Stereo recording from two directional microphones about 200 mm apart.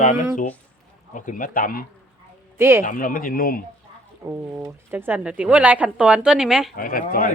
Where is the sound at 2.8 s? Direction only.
40° left (ahead or behind).